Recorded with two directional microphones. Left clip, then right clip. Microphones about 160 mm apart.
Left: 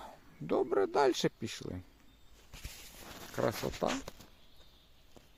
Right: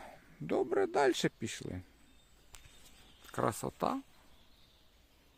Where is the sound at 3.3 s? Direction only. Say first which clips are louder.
Left 1 dB; 5° right (ahead or behind).